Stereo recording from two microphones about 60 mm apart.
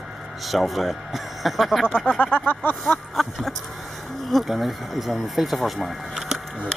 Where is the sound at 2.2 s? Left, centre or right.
Left.